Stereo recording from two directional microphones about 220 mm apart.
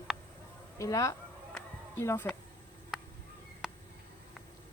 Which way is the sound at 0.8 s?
15° left (ahead or behind).